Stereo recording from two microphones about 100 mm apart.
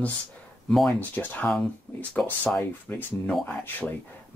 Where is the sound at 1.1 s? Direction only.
15° left (ahead or behind).